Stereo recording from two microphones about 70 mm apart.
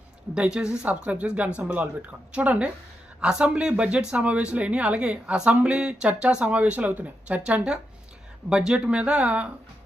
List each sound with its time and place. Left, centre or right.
0.3 s speech: centre